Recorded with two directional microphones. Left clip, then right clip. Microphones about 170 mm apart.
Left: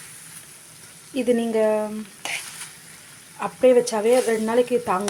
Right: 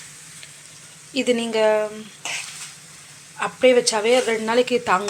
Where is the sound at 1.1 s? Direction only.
25° left (ahead or behind).